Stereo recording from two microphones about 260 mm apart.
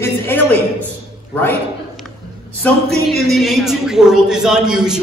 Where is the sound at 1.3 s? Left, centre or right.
Centre.